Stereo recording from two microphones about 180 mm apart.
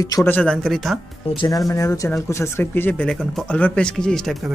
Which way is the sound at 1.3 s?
25° left (ahead or behind).